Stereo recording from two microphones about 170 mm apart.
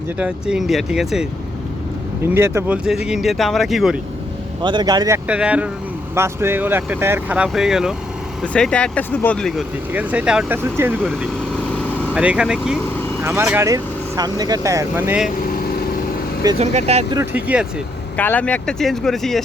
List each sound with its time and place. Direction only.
0.2 s speech: 5° right (ahead or behind)
2.2 s speech: 15° right (ahead or behind)
4.6 s speech: 25° right (ahead or behind)
5.3 s speech: 5° right (ahead or behind)
9.9 s speech: 10° right (ahead or behind)
11.0 s vehicle: 5° left (ahead or behind)
12.1 s speech: 5° right (ahead or behind)
13.2 s speech: 15° right (ahead or behind)
16.6 s speech: 40° right (ahead or behind)
17.3 s speech: 10° right (ahead or behind)
18.2 s speech: 10° left (ahead or behind)